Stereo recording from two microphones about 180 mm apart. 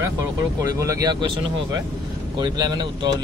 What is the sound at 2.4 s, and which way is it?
Speech, 25° right (ahead or behind).